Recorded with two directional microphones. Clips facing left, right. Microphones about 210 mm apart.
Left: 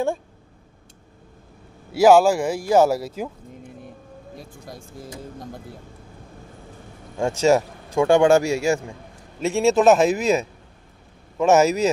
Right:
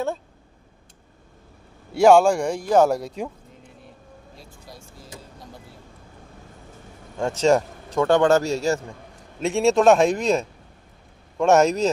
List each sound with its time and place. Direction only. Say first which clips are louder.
2.0 s speech: left 1 dB; 5° left (ahead or behind)
4.4 s speech: left 5 dB; 50° left (ahead or behind)
7.2 s speech: left 1 dB; 10° left (ahead or behind)